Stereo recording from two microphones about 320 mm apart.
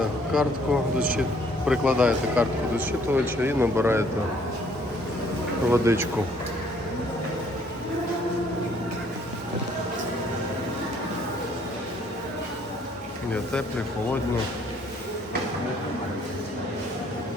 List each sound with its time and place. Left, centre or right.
0.3 s speech: centre
5.7 s speech: centre
13.3 s speech: centre